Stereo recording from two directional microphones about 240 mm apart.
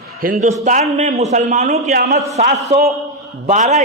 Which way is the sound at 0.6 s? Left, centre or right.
Right.